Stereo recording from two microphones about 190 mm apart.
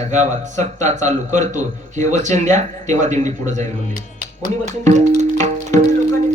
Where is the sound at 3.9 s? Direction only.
50° left (ahead or behind).